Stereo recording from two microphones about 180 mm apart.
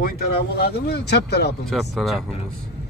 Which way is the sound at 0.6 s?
60° left (ahead or behind).